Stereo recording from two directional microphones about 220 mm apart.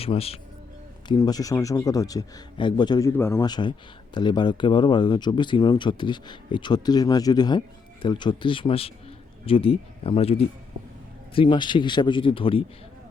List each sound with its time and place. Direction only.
0.0 s speech: 25° left (ahead or behind)